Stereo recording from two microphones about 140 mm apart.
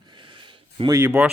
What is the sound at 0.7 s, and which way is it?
Speech, 25° right (ahead or behind).